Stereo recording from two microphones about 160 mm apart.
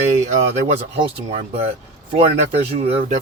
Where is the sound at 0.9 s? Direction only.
40° right (ahead or behind).